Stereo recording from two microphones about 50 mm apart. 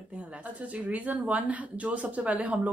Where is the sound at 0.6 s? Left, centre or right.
Right.